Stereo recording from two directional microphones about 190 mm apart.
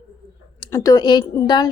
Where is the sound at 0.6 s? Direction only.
20° left (ahead or behind).